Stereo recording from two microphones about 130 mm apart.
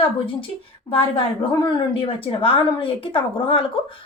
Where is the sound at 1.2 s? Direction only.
40° left (ahead or behind).